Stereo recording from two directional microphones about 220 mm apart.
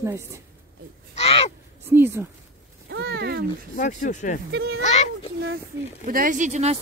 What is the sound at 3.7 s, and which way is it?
Speech, 35° left (ahead or behind).